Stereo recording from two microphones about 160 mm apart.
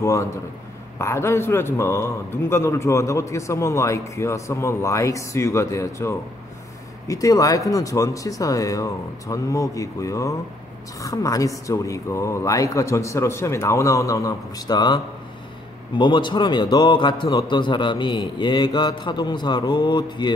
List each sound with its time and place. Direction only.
0.0 s a man's voice: 20° left (ahead or behind)
16.0 s a man's voice: 30° left (ahead or behind)